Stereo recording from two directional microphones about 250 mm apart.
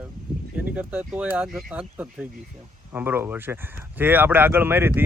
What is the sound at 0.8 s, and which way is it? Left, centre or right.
Speech, centre.